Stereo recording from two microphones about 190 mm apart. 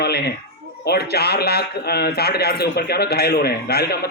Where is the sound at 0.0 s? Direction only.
60° left (ahead or behind).